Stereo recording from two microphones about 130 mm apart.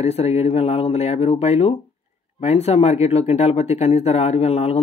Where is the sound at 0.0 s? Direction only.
55° left (ahead or behind).